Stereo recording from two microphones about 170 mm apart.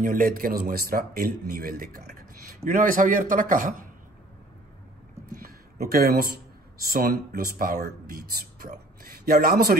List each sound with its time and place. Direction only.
0.0 s speech: 55° right (ahead or behind)
5.4 s speech: 65° right (ahead or behind)